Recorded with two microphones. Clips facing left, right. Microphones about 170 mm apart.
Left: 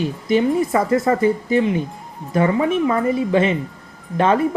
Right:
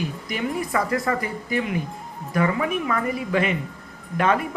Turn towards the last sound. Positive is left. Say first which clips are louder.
# left 4 dB
turn(degrees=30)  # may be behind; listen again after turning